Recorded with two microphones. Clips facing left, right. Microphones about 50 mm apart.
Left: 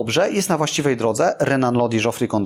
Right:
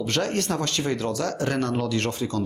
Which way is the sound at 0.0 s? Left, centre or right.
Left.